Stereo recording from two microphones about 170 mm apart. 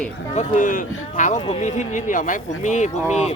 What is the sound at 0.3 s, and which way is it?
A man's voice, 50° left (ahead or behind).